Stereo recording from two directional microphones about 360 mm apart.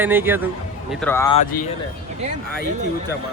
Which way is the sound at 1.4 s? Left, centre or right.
Left.